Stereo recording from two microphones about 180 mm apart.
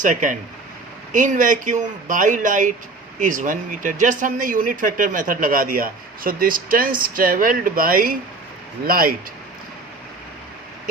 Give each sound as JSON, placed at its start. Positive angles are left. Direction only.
{"t": 0.0, "sound": "speech", "side_deg": -45}